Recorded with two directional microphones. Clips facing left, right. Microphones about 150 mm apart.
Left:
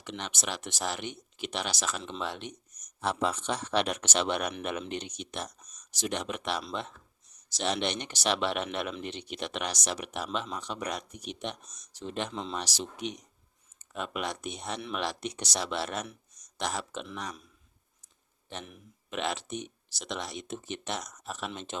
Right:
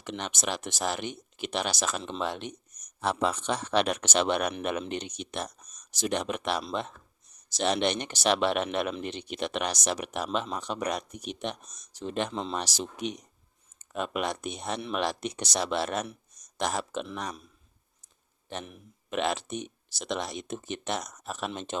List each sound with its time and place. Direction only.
0.0 s speech: 45° right (ahead or behind)
3.0 s speech: 70° right (ahead or behind); by 12.3 s 50° right (ahead or behind)
12.3 s speech: 35° right (ahead or behind)
12.5 s speech: 50° right (ahead or behind)
19.1 s speech: 50° right (ahead or behind)